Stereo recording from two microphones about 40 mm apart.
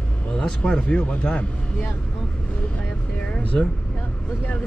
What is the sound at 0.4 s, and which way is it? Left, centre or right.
Speech, left.